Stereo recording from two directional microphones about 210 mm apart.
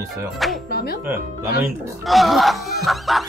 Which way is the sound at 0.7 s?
45° left (ahead or behind).